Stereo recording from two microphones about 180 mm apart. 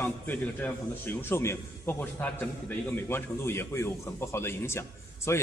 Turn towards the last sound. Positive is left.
turn(degrees=15)  # may be behind; listen again after turning